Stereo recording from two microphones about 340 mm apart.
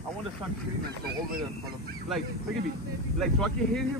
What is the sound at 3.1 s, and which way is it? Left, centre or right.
Speech, centre.